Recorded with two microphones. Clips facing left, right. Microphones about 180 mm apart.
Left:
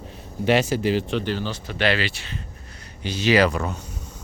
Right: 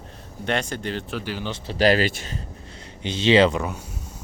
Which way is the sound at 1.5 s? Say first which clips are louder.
Right 8 dB; 35° right (ahead or behind).